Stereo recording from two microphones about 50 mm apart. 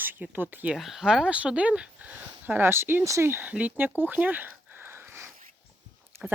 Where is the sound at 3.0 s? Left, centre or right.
Right.